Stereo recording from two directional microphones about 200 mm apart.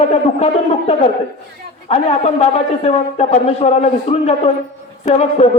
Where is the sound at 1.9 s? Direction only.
30° left (ahead or behind).